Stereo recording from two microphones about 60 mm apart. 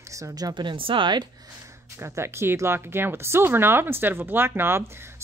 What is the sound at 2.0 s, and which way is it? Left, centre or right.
Speech, right.